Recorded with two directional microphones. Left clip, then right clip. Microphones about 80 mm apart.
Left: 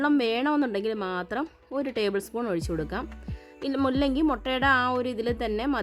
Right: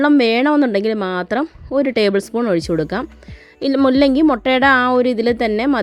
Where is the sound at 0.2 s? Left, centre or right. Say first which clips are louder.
Right 11 dB; right.